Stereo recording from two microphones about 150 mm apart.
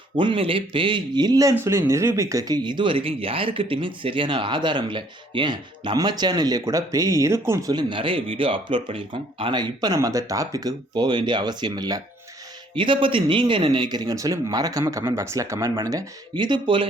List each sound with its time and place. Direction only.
0.2 s speech: 35° right (ahead or behind); by 7.7 s 15° right (ahead or behind)
7.7 s speech: 30° right (ahead or behind)